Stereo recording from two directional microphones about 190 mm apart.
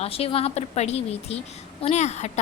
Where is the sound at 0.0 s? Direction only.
30° left (ahead or behind).